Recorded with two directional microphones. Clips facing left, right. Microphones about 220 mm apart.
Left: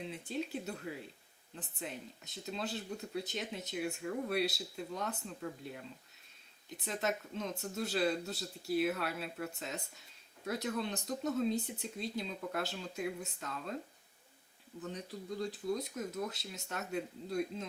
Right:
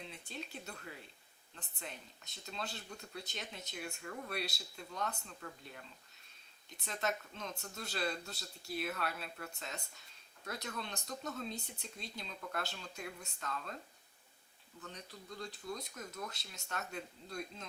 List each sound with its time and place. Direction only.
0.0 s speech: 5° left (ahead or behind)
14.8 s speech: 5° left (ahead or behind)